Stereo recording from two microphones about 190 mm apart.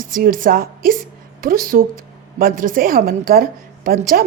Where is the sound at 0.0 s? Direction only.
45° right (ahead or behind).